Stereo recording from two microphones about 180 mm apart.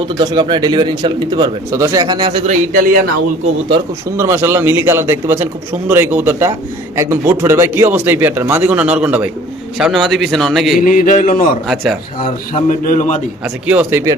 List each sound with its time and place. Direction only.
0.2 s speech: 25° right (ahead or behind)
2.5 s a man's voice: 50° right (ahead or behind)
4.2 s a man's voice: 15° right (ahead or behind)
10.8 s a sound: 50° left (ahead or behind)
11.7 s speech: centre (ahead or behind)
12.6 s a sound: 45° left (ahead or behind)
13.4 s a man's voice: 10° right (ahead or behind)